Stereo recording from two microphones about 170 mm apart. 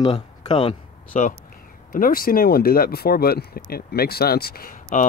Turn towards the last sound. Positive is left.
turn(degrees=55)  # may be behind; listen again after turning